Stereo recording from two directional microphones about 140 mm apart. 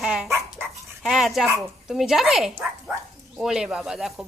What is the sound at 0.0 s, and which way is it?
Speech, 5° right (ahead or behind).